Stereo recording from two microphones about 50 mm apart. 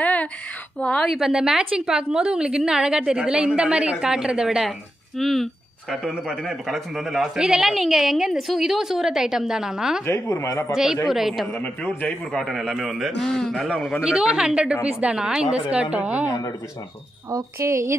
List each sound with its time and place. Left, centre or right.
0.0 s a sound: left
0.7 s a man's voice: left
1.0 s a woman's voice: centre
4.6 s a man's voice: centre
7.3 s a woman's voice: centre
10.0 s speech: left
10.7 s a woman's voice: centre
11.5 s a man's voice: left
12.3 s a man's voice: centre
13.2 s a man's voice: centre
14.2 s a woman's voice: centre
15.1 s a woman's voice: centre
17.3 s speech: right